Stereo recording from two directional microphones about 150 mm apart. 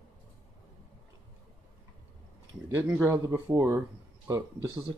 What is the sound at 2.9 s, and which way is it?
Speech, 15° right (ahead or behind).